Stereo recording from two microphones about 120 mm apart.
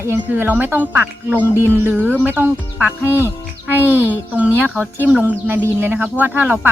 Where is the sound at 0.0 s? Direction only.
20° right (ahead or behind).